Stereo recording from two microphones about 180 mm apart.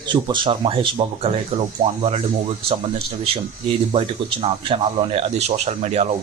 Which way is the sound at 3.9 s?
30° right (ahead or behind).